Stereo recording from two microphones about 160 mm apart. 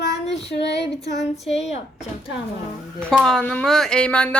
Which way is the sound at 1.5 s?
40° left (ahead or behind).